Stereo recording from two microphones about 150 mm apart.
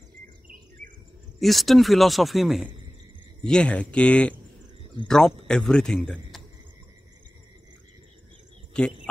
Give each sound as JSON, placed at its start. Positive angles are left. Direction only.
{"t": 1.4, "sound": "speech", "side_deg": 0}
{"t": 8.7, "sound": "speech", "side_deg": 5}